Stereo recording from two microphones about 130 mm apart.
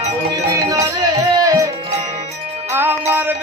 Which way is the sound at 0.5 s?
25° right (ahead or behind).